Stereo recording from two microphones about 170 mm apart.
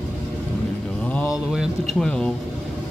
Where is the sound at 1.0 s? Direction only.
5° left (ahead or behind).